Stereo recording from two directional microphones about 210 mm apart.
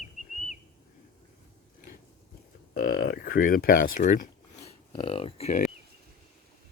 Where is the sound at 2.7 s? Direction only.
45° left (ahead or behind).